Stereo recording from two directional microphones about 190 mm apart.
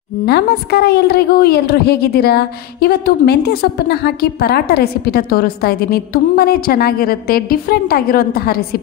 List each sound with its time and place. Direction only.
0.2 s a woman's voice: 55° left (ahead or behind)